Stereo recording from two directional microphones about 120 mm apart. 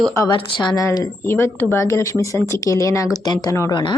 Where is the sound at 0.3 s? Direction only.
40° left (ahead or behind).